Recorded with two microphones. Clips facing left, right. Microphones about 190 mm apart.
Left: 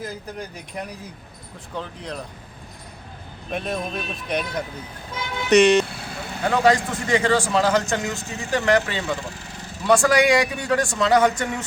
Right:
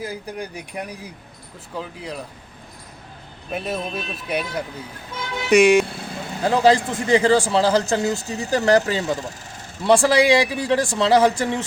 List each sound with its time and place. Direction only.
0.0 s speech: 10° right (ahead or behind)
3.5 s speech: 5° right (ahead or behind)
6.4 s a man's voice: 30° right (ahead or behind)
9.8 s a man's voice: 30° right (ahead or behind)